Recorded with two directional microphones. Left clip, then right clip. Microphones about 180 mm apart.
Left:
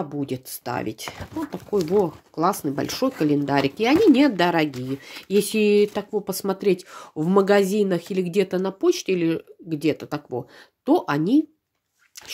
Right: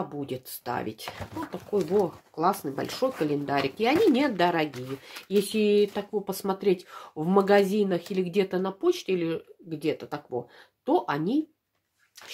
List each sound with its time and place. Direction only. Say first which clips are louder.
0.1 s speech: left 5 dB; 30° left (ahead or behind)